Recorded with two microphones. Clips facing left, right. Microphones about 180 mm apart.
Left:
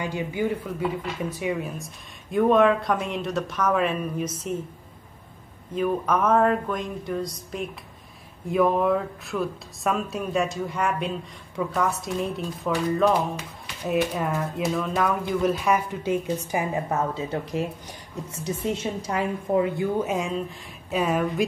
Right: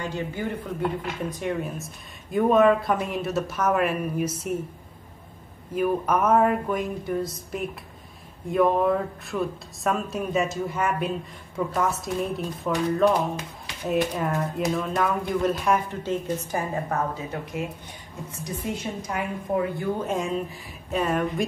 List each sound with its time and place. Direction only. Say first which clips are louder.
0.0 s a woman's voice: left 3 dB; 15° left (ahead or behind)
0.7 s speech: even; centre (ahead or behind)
5.8 s speech: even; 10° right (ahead or behind)
8.5 s speech: even; centre (ahead or behind)
15.9 s a woman's voice: left 2 dB; 10° left (ahead or behind)
17.1 s speech: left 4 dB; 30° left (ahead or behind)
18.8 s speech: left 3 dB; 30° left (ahead or behind)
19.8 s speech: left 2 dB; 5° left (ahead or behind)